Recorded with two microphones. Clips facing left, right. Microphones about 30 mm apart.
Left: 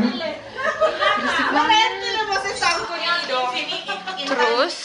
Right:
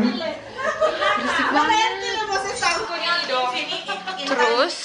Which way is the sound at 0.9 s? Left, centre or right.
Centre.